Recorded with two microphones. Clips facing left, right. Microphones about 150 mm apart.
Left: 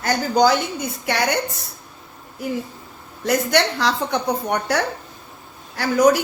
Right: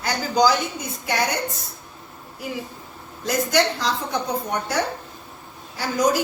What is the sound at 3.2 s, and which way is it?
A woman's voice, 70° left (ahead or behind).